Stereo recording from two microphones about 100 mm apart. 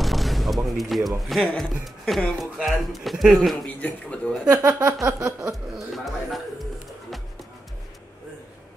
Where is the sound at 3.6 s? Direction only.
10° left (ahead or behind).